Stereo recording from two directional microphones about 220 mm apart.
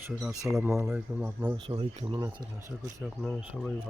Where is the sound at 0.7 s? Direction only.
15° right (ahead or behind).